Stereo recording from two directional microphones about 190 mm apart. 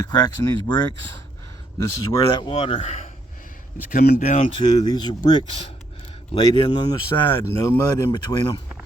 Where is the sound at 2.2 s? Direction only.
25° left (ahead or behind); by 4.5 s 45° left (ahead or behind).